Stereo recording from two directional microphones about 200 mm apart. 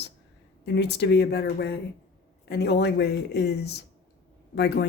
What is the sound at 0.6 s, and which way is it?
Speech, 55° left (ahead or behind).